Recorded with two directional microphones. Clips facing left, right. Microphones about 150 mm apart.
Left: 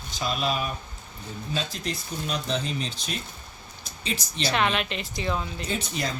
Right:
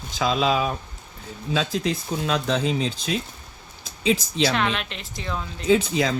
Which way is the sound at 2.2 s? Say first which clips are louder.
Right 5 dB; 90° right.